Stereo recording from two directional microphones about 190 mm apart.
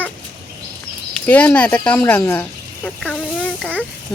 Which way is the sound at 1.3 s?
10° left (ahead or behind).